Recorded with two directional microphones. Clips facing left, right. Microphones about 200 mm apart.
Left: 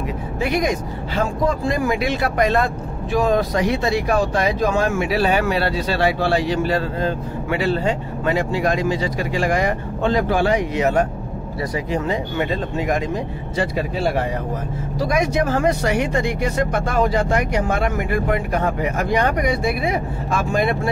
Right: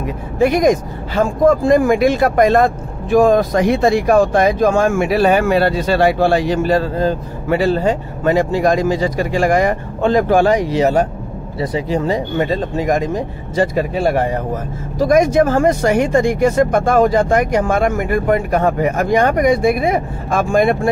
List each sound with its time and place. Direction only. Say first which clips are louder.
0.4 s speech: right 8 dB; 45° right (ahead or behind)
15.0 s speech: right 8 dB; 45° right (ahead or behind)